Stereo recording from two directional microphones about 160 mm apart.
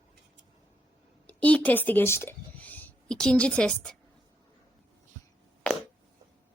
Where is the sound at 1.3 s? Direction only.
10° left (ahead or behind).